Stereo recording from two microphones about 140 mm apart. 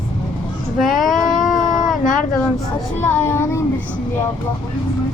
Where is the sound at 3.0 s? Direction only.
15° left (ahead or behind).